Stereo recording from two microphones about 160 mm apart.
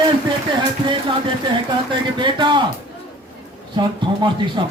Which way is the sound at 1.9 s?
30° right (ahead or behind).